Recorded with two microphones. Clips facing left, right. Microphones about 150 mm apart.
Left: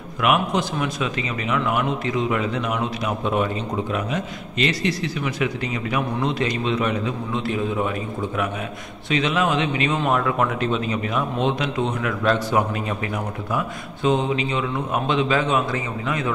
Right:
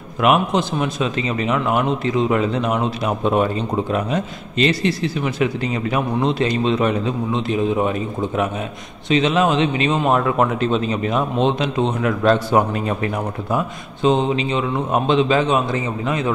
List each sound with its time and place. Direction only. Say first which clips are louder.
0.2 s speech: right 4 dB; 30° right (ahead or behind)
13.6 s speech: right 4 dB; 25° right (ahead or behind)